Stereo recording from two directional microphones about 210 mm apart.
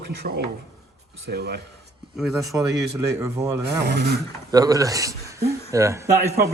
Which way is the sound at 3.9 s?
50° right (ahead or behind).